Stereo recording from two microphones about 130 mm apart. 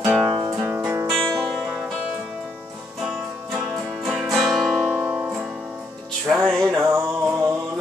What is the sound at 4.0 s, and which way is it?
Music, centre (ahead or behind).